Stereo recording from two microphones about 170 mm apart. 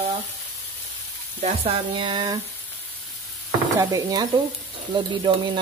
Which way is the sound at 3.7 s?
20° right (ahead or behind).